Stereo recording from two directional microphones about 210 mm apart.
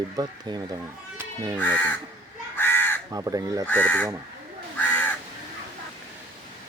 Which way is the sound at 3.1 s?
15° right (ahead or behind).